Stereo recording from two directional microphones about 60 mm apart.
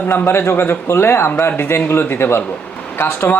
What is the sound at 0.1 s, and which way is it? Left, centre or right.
A man's voice, left.